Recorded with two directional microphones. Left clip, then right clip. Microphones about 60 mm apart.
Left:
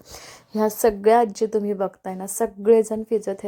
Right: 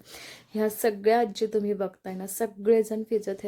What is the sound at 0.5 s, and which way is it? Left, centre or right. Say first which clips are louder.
Speech: left 6 dB; left.